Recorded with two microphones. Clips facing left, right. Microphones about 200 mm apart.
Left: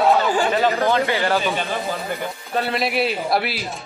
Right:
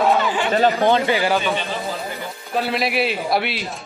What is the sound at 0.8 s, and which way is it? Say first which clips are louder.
Speech: right 2 dB; 15° right (ahead or behind).